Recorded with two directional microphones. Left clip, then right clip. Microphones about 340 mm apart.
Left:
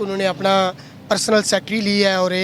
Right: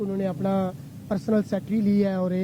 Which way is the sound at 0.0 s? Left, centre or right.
Centre.